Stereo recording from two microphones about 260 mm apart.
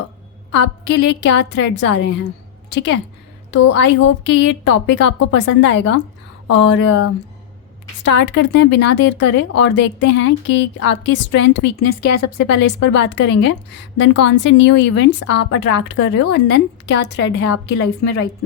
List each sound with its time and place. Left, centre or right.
0.5 s a woman's voice: left
3.7 s a woman's voice: left
11.9 s speech: left
12.5 s a woman's voice: left